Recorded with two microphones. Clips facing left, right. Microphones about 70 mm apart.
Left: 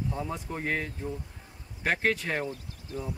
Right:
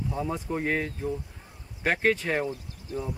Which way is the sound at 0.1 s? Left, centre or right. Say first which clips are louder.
Right 4 dB; centre.